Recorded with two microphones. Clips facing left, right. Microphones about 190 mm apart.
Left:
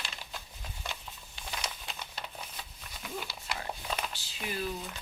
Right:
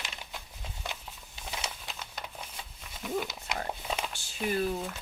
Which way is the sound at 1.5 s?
25° right (ahead or behind).